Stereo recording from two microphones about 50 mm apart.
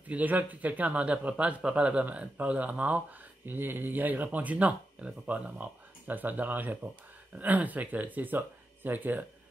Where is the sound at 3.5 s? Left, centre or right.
Right.